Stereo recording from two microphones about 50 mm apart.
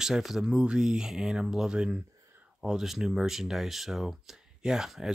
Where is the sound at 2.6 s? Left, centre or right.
Centre.